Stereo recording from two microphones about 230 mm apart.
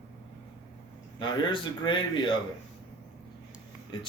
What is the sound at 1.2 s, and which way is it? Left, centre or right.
A man's voice, left.